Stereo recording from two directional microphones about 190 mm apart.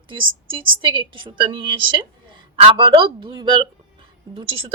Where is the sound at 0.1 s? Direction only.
25° right (ahead or behind).